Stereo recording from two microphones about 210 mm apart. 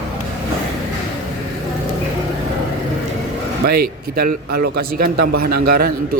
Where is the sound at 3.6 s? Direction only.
45° right (ahead or behind).